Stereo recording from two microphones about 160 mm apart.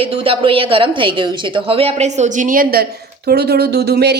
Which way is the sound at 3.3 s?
90° right.